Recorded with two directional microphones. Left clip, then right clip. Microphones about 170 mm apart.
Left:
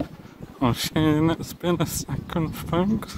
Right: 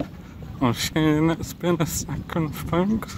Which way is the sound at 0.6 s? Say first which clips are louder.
Right 1 dB; 20° right (ahead or behind).